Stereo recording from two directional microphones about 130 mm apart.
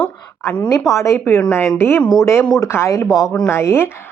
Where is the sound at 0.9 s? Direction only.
20° left (ahead or behind).